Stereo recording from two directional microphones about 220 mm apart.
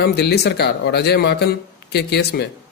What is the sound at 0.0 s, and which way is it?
A man's voice, 50° left (ahead or behind).